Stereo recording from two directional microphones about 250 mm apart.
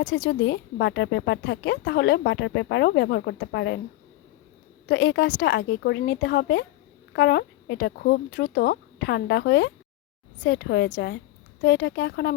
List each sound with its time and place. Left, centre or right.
0.0 s speech: left
4.9 s speech: left